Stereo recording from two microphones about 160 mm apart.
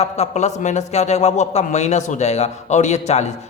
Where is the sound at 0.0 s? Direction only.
45° left (ahead or behind).